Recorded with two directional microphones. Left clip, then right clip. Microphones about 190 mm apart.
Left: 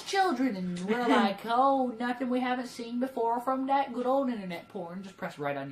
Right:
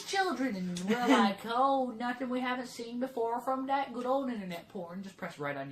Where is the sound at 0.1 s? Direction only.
20° left (ahead or behind).